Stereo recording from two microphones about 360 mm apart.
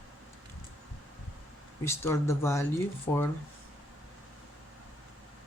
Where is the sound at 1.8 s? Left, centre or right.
Centre.